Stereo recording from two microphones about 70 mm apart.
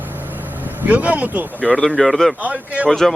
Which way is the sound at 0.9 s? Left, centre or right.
Right.